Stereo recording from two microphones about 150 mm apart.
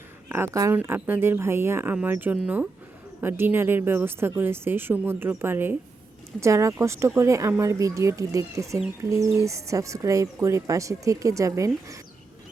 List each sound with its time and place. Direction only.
0.3 s a woman's voice: 15° right (ahead or behind)